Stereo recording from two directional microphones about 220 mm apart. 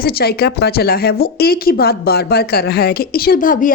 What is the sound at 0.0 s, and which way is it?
A woman's voice, 45° left (ahead or behind).